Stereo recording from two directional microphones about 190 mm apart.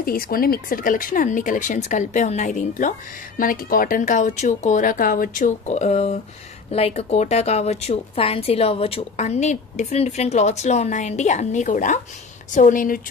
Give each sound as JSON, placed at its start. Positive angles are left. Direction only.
{"t": 0.0, "sound": "a woman's voice", "side_deg": 50}